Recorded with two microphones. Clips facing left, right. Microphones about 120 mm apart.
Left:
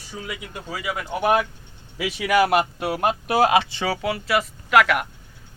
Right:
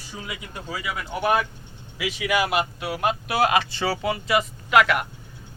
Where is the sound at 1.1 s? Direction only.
20° left (ahead or behind).